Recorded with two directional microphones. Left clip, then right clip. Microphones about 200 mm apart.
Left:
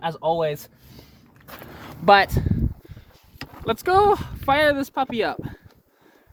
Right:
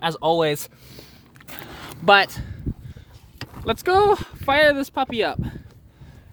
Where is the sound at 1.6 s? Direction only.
20° right (ahead or behind).